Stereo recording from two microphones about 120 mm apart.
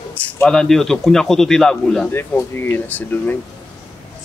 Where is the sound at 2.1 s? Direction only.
20° left (ahead or behind).